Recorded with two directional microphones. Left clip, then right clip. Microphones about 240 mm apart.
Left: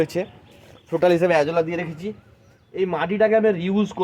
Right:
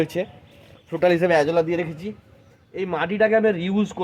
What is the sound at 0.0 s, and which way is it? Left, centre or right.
Speech, centre.